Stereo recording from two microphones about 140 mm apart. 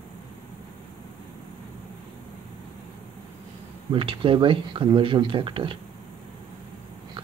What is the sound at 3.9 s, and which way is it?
Speech, 40° right (ahead or behind).